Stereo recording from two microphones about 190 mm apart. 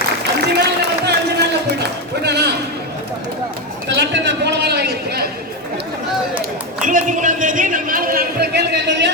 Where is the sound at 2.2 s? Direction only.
60° right (ahead or behind).